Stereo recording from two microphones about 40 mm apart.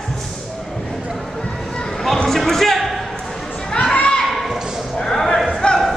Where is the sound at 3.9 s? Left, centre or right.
Left.